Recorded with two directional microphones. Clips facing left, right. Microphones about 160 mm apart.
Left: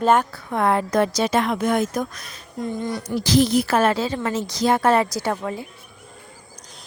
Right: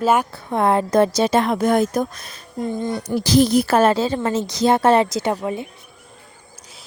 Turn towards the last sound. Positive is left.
turn(degrees=-20)  # may be behind; listen again after turning